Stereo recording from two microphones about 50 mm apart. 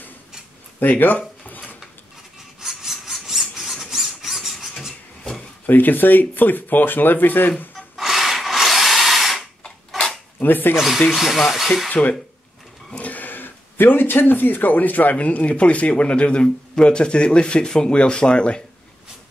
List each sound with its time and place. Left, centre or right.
0.7 s a sound: left
2.6 s a sound: centre
5.7 s speech: left
7.9 s wood: centre
10.4 s speech: left
10.8 s speech: centre
11.9 s speech: left